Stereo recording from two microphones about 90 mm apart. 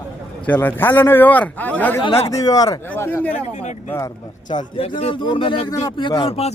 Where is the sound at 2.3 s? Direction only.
45° left (ahead or behind).